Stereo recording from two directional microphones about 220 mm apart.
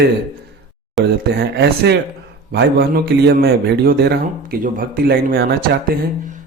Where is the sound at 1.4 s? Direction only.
50° right (ahead or behind).